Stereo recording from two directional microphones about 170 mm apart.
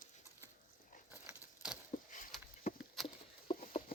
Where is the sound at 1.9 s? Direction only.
45° left (ahead or behind).